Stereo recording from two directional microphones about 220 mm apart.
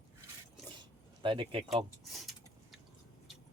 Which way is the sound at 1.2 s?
20° right (ahead or behind).